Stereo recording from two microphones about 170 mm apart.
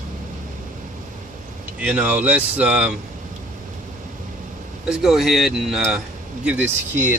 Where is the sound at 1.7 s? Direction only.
10° right (ahead or behind).